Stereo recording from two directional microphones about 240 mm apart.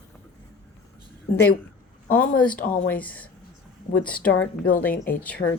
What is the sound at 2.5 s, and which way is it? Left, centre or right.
Speech, left.